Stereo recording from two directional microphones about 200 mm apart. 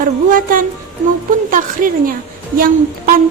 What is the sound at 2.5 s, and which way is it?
Speech, 45° right (ahead or behind).